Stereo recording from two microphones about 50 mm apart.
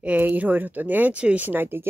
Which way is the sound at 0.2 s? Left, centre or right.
Right.